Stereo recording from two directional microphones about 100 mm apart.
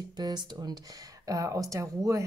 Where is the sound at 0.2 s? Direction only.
45° right (ahead or behind).